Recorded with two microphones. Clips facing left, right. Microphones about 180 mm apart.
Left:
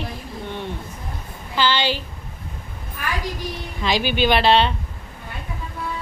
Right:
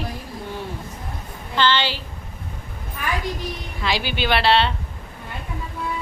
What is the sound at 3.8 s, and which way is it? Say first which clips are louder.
Speech: left 4 dB; 20° left (ahead or behind).